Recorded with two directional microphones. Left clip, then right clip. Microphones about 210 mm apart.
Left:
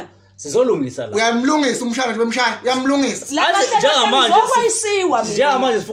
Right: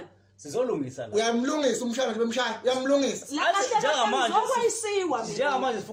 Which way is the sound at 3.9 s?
45° left (ahead or behind).